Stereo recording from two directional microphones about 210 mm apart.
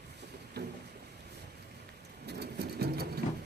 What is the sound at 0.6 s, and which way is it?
Boat, 50° right (ahead or behind).